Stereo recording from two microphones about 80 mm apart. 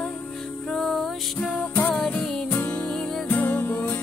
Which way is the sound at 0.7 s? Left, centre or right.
Centre.